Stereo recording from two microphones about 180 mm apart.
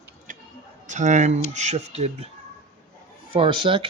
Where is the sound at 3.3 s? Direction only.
30° right (ahead or behind).